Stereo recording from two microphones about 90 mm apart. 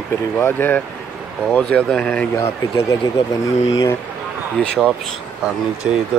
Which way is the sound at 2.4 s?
40° left (ahead or behind).